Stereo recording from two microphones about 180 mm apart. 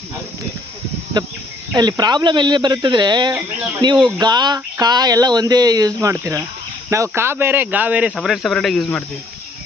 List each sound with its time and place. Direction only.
1.2 s speech: 25° right (ahead or behind); by 9.0 s 5° left (ahead or behind)